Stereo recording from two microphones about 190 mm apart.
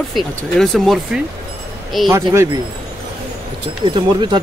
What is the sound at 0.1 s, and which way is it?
Speech, centre (ahead or behind).